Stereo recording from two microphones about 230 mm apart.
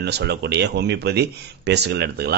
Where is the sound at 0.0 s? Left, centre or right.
Right.